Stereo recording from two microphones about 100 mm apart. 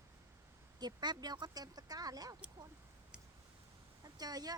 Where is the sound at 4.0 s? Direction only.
40° right (ahead or behind).